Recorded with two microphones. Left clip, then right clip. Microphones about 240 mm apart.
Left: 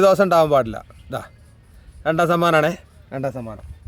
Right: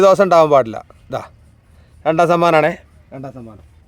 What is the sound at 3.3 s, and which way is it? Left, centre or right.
Speech, left.